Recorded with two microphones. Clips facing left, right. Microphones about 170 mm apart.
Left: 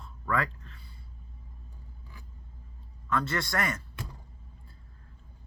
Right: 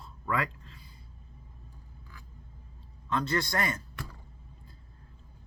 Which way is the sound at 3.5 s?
35° right (ahead or behind).